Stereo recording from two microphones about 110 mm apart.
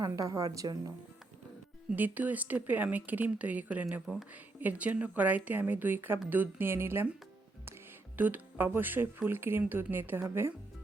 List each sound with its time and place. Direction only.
0.0 s a woman's voice: 30° right (ahead or behind)
1.9 s speech: 15° right (ahead or behind)
4.0 s speech: 5° left (ahead or behind)
4.6 s speech: 15° right (ahead or behind)
8.1 s speech: 15° right (ahead or behind)